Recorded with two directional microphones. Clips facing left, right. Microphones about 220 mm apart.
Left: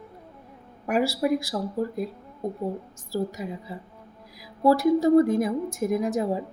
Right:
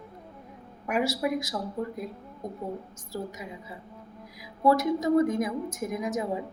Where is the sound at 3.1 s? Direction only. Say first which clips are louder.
Left 7 dB; 35° left (ahead or behind).